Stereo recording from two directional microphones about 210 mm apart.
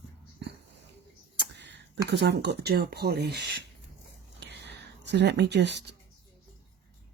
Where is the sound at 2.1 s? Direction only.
55° right (ahead or behind).